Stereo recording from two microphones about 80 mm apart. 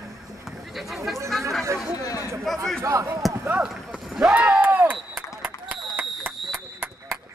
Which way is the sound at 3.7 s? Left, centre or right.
Centre.